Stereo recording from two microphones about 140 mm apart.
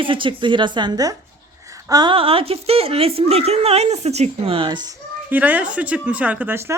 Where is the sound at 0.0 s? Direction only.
35° right (ahead or behind).